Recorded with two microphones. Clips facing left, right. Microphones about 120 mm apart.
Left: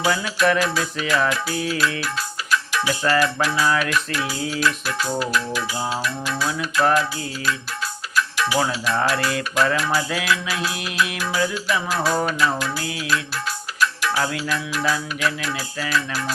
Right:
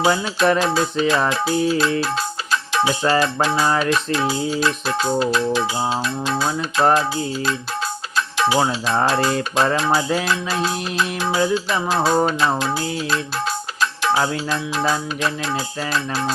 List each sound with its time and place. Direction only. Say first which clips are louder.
0.0 s music: right 3 dB; 25° right (ahead or behind)